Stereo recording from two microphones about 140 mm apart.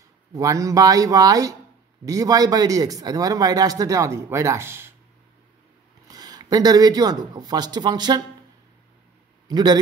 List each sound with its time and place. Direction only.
0.3 s a man's voice: 25° right (ahead or behind)
6.0 s speech: 30° right (ahead or behind)
9.5 s a man's voice: 30° right (ahead or behind)